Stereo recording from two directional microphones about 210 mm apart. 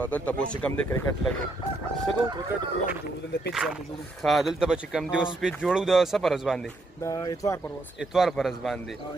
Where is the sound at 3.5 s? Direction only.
Centre (ahead or behind).